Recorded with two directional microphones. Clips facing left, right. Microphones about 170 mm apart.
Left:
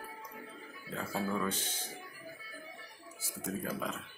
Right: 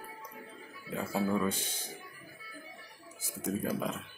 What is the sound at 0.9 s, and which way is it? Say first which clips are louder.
Speech: right 4 dB; 10° right (ahead or behind).